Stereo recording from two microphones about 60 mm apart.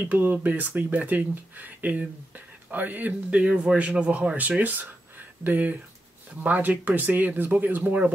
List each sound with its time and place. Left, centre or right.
0.0 s speech: right